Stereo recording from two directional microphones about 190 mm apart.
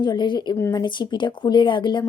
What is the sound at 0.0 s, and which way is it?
Speech, 25° left (ahead or behind).